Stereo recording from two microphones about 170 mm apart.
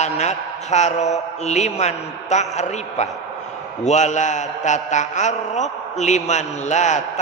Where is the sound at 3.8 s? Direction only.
45° left (ahead or behind).